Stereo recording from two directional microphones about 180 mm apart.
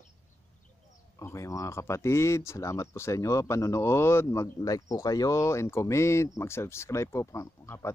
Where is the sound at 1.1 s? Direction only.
15° left (ahead or behind).